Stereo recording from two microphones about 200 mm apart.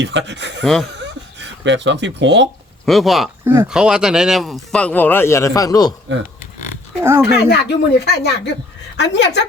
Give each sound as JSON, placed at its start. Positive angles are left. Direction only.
{"t": 0.0, "sound": "speech", "side_deg": -65}
{"t": 0.6, "sound": "speech", "side_deg": 0}
{"t": 1.0, "sound": "a sound", "side_deg": -65}
{"t": 2.8, "sound": "speech", "side_deg": 0}
{"t": 3.4, "sound": "speech", "side_deg": -10}
{"t": 6.1, "sound": "speech", "side_deg": -60}
{"t": 7.3, "sound": "speech", "side_deg": 55}